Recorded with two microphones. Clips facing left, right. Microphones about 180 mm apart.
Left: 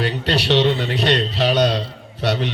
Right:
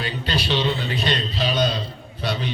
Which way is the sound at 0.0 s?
70° left (ahead or behind).